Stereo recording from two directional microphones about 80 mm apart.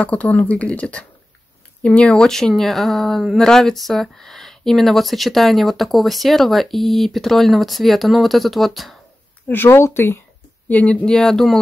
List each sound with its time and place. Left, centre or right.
0.0 s speech: centre
9.5 s speech: left
10.7 s speech: centre